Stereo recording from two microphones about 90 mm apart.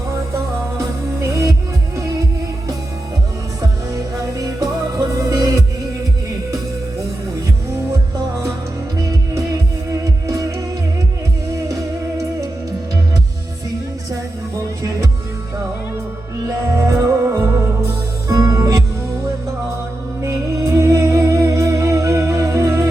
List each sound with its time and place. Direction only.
0.1 s music: 30° right (ahead or behind)
3.9 s music: 40° right (ahead or behind)
10.0 s music: 40° right (ahead or behind)
11.7 s music: 35° right (ahead or behind)
16.7 s music: 35° right (ahead or behind)
20.7 s music: 35° right (ahead or behind)